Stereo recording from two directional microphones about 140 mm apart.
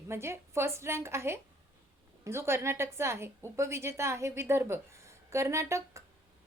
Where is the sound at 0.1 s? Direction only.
20° right (ahead or behind).